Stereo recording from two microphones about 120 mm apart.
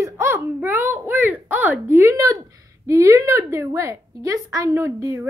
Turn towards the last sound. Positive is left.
turn(degrees=-25)  # may be behind; listen again after turning